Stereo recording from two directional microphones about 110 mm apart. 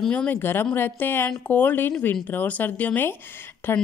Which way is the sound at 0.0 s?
10° left (ahead or behind).